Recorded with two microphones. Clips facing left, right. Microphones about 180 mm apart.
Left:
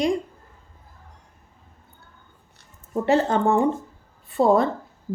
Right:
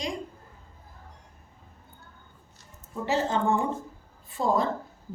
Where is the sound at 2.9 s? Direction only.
60° left (ahead or behind).